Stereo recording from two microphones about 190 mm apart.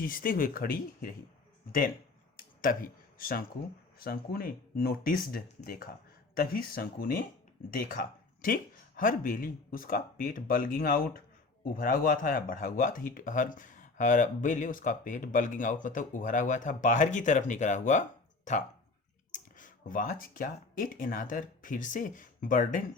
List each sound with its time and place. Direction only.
0.0 s speech: 45° left (ahead or behind)
2.3 s a sound: 45° left (ahead or behind)
4.0 s speech: 50° left (ahead or behind)